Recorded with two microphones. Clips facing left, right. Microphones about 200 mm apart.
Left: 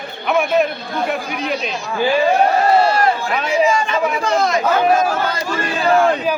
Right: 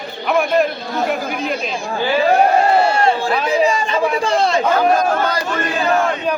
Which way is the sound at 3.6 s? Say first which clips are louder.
Even; 35° right (ahead or behind).